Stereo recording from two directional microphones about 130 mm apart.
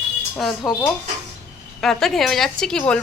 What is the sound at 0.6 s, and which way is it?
Speech, 30° left (ahead or behind).